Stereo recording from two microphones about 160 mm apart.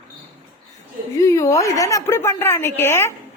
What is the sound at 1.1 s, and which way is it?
A woman's voice, 20° left (ahead or behind).